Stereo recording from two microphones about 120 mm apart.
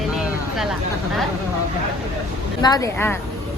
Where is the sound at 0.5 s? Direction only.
5° right (ahead or behind).